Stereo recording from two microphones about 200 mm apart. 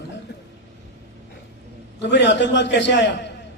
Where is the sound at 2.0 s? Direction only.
60° left (ahead or behind).